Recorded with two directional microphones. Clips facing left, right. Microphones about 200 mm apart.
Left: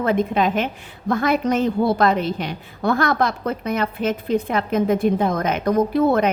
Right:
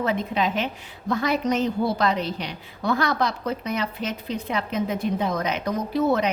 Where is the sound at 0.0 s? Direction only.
50° left (ahead or behind).